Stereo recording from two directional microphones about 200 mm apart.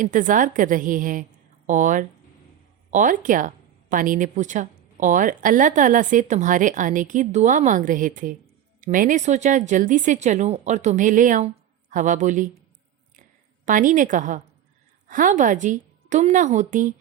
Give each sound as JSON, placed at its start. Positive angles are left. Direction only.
{"t": 0.0, "sound": "a woman's voice", "side_deg": -40}
{"t": 13.7, "sound": "a woman's voice", "side_deg": -40}